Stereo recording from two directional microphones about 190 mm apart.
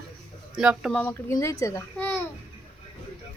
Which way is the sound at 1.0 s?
15° left (ahead or behind).